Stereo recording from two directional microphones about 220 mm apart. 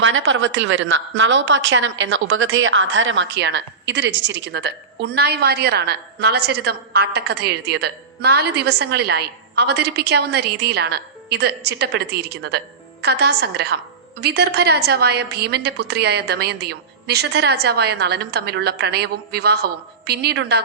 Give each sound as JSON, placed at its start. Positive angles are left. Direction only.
{"t": 0.0, "sound": "a woman's voice", "side_deg": -60}